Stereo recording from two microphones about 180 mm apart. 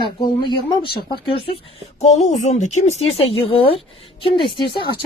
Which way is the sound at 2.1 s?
40° left (ahead or behind).